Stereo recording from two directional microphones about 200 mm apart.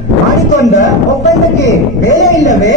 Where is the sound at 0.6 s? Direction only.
35° left (ahead or behind).